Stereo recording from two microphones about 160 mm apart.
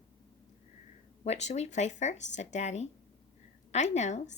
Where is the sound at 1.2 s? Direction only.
45° left (ahead or behind).